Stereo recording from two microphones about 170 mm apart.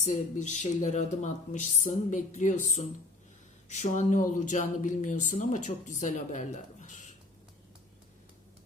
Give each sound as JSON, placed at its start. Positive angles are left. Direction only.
{"t": 0.0, "sound": "speech", "side_deg": 45}